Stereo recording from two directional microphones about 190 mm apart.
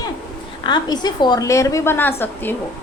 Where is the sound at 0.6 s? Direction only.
20° left (ahead or behind).